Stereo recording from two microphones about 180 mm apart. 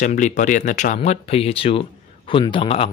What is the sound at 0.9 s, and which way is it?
Speech, 35° left (ahead or behind).